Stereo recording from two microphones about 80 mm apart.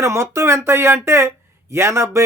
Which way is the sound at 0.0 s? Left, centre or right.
Right.